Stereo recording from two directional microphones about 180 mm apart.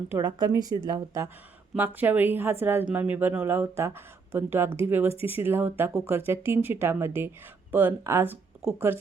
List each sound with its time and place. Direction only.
0.1 s a woman's voice: 20° right (ahead or behind)